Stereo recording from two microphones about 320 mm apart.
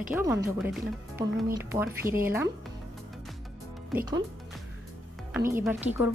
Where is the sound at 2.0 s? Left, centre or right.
Right.